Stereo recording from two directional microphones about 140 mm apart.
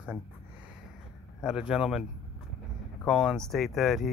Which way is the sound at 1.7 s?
5° right (ahead or behind).